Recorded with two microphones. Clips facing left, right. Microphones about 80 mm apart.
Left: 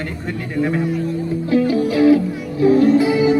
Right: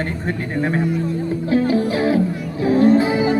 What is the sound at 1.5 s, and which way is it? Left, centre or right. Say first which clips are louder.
Music: left 1 dB; right.